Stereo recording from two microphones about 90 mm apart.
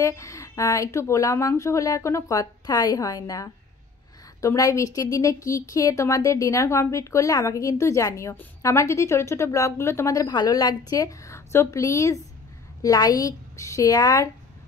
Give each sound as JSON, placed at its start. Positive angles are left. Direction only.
{"t": 0.0, "sound": "a woman's voice", "side_deg": 35}